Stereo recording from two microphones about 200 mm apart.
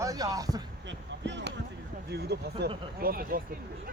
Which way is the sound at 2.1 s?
55° right (ahead or behind).